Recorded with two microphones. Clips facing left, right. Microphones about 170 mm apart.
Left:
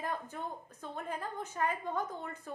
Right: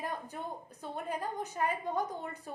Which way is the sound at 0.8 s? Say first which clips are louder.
Right 3 dB; 15° right (ahead or behind).